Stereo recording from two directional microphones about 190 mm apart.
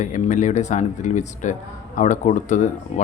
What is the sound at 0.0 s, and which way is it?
Speech, 40° left (ahead or behind).